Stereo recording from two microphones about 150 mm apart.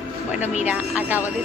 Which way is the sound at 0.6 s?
10° right (ahead or behind).